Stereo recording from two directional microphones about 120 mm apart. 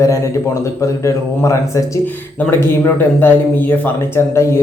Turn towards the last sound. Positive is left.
turn(degrees=20)  # may be behind; listen again after turning